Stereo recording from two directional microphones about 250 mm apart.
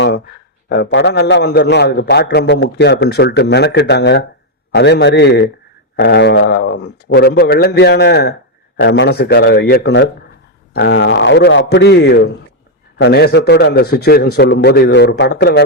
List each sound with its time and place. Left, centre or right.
0.7 s a man's voice: left